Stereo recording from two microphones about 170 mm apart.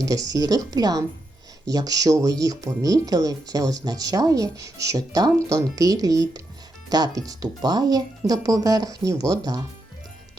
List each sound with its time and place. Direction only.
0.0 s speech: 20° right (ahead or behind)